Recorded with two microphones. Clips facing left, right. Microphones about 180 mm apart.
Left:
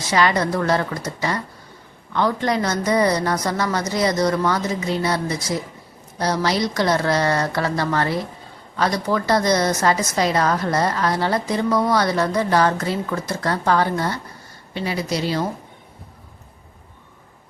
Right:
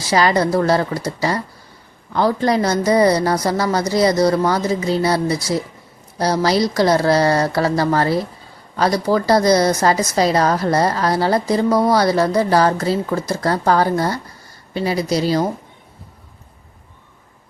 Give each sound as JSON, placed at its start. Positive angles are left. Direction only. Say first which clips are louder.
{"t": 0.0, "sound": "a woman's voice", "louder": "right 3 dB", "side_deg": -35}